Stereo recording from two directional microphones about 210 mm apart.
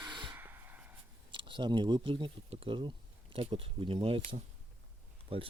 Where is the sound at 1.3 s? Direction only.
25° right (ahead or behind).